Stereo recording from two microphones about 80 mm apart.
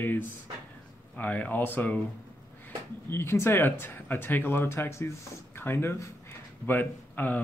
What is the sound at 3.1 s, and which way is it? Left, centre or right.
Speech, left.